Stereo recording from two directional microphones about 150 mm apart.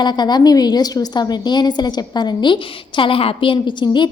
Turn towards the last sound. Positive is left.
turn(degrees=30)  # may be behind; listen again after turning